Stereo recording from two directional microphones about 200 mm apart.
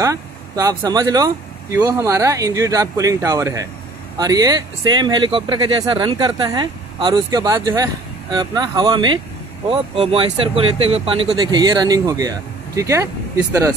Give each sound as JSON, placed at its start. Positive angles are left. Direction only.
{"t": 0.0, "sound": "speech", "side_deg": -15}